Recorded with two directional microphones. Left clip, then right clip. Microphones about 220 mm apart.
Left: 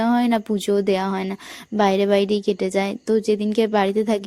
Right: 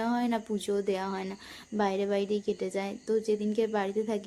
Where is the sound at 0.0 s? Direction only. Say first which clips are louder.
Left 10 dB; 35° left (ahead or behind).